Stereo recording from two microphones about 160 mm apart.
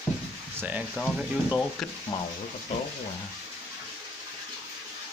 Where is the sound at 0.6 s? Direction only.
10° right (ahead or behind).